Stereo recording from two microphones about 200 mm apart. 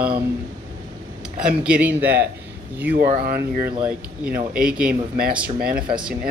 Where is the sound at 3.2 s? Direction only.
45° right (ahead or behind).